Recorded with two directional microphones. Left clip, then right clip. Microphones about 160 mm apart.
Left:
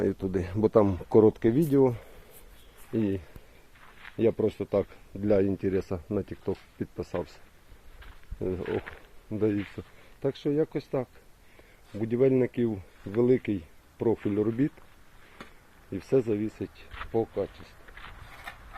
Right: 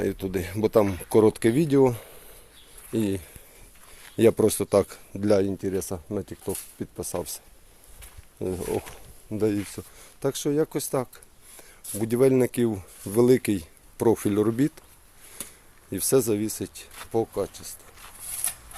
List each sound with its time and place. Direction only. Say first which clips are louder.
0.0 s speech: right 1 dB; centre (ahead or behind)
1.2 s speech: right 3 dB; 15° right (ahead or behind)
4.2 s speech: right 6 dB; 50° right (ahead or behind)
5.5 s speech: even; 5° right (ahead or behind)
8.4 s speech: right 2 dB; 20° right (ahead or behind)
15.9 s speech: right 4 dB; 30° right (ahead or behind)